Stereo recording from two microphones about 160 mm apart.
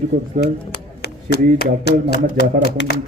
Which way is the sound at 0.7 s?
90° left.